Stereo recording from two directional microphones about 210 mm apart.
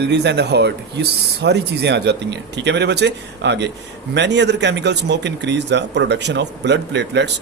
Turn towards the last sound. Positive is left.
turn(degrees=-55)  # may be behind; listen again after turning